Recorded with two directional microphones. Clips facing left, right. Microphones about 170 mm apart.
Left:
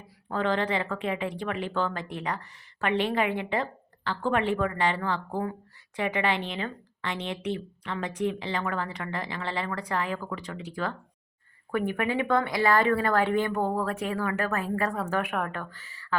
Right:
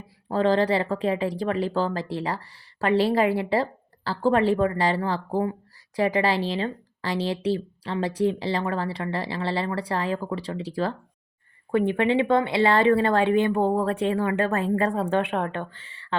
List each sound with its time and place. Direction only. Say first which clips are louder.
0.3 s speech: right 6 dB; 35° right (ahead or behind)